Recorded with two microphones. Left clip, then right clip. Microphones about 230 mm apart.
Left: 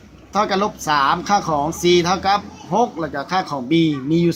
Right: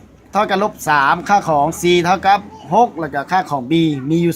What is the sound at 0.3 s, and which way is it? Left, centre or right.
Speech, right.